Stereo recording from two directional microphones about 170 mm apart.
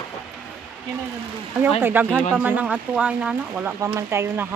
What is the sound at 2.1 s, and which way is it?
Speech, 5° left (ahead or behind).